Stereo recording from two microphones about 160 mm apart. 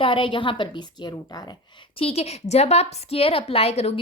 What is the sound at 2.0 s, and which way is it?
A woman's voice, 40° left (ahead or behind).